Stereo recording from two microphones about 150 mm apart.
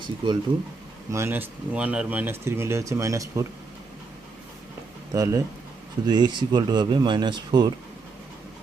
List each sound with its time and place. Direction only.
0.2 s speech: 35° right (ahead or behind)
1.1 s speech: 15° right (ahead or behind)
5.1 s speech: 25° right (ahead or behind)